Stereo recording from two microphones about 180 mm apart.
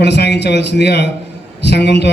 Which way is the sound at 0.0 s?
70° left (ahead or behind).